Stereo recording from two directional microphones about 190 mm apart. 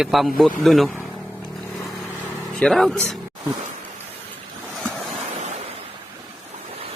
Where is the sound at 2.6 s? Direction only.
5° left (ahead or behind).